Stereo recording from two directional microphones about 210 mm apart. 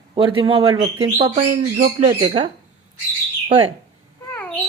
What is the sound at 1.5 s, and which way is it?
Speech, 35° right (ahead or behind).